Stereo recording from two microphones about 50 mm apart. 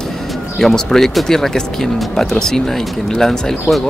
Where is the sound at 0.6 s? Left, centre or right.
Centre.